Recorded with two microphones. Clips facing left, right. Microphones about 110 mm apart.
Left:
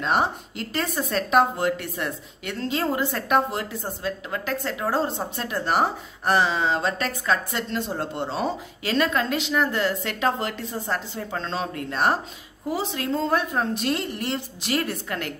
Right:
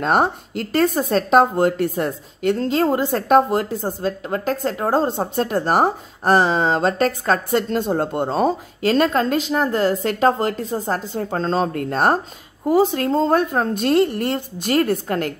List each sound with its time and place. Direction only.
0.0 s speech: 50° right (ahead or behind)